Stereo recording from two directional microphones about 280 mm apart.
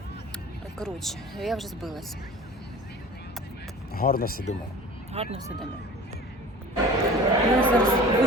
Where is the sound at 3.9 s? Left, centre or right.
Left.